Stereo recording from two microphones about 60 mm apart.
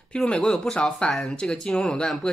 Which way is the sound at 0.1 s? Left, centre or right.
Centre.